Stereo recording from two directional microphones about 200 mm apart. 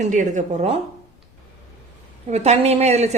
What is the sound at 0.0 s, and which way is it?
Speech, 40° right (ahead or behind).